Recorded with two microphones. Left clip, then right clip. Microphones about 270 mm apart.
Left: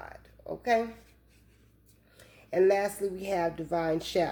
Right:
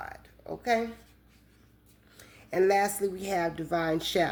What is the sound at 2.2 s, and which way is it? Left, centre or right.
A woman's voice, right.